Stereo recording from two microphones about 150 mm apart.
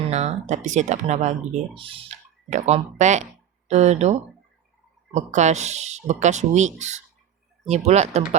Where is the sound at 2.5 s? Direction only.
50° right (ahead or behind).